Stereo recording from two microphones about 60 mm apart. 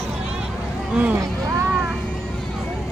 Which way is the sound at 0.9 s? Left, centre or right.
Right.